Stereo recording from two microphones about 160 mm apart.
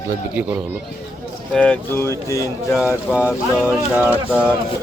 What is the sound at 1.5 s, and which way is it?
Speech, 10° left (ahead or behind).